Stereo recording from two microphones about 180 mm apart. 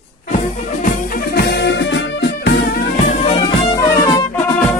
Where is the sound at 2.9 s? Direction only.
40° left (ahead or behind).